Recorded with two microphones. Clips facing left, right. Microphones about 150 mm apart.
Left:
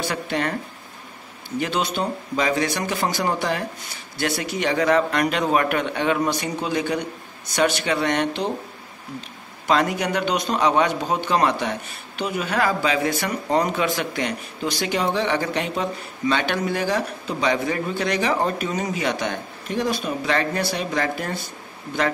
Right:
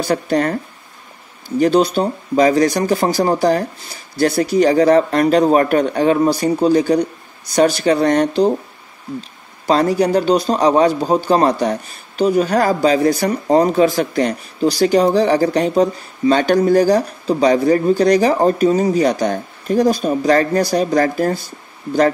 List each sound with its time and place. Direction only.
0.0 s a man's voice: 40° right (ahead or behind)
1.6 s a man's voice: 35° right (ahead or behind)
9.7 s a man's voice: 35° right (ahead or behind)